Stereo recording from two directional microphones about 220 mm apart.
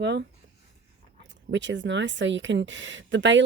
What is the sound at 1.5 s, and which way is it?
Speech, 55° right (ahead or behind).